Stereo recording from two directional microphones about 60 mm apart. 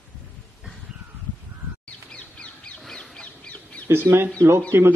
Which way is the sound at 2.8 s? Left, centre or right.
Centre.